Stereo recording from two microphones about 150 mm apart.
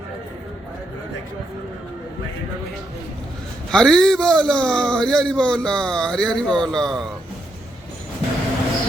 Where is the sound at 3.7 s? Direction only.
5° left (ahead or behind).